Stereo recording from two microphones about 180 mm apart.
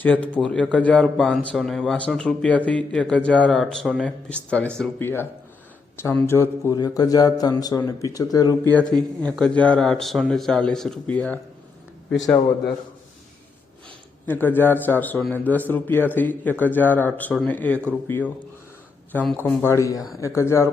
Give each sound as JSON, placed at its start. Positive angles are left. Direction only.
{"t": 0.0, "sound": "a man's voice", "side_deg": 10}
{"t": 8.7, "sound": "a man's voice", "side_deg": 5}
{"t": 14.3, "sound": "a man's voice", "side_deg": 10}